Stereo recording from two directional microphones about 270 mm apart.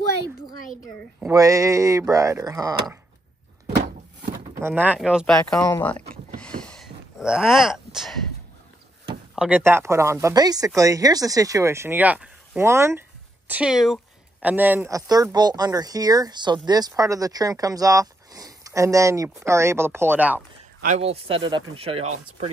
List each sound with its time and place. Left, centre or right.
1.2 s speech: centre
4.6 s speech: centre
9.3 s speech: centre
20.8 s speech: right